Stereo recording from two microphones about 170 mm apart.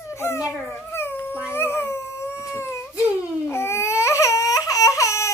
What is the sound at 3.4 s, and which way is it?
Baby cry, 15° left (ahead or behind).